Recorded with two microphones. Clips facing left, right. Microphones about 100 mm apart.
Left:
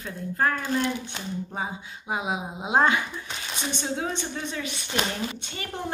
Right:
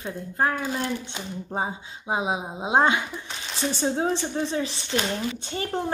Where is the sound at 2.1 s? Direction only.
25° right (ahead or behind).